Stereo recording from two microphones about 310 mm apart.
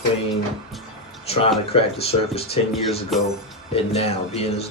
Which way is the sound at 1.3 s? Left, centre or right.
Centre.